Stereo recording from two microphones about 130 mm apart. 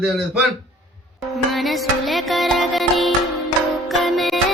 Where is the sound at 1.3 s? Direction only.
Centre (ahead or behind).